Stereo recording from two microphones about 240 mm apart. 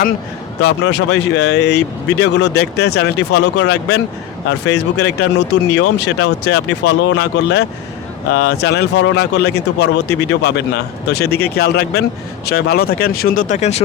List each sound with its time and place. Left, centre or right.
0.6 s speech: left